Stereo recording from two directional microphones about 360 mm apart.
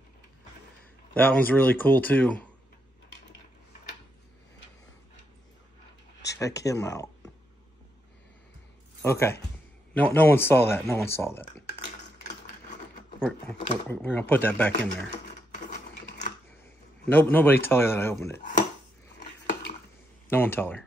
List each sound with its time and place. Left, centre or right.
1.1 s speech: centre
6.3 s speech: centre
9.0 s speech: centre
13.2 s speech: centre
16.1 s typewriter: left
17.0 s speech: centre
20.2 s speech: centre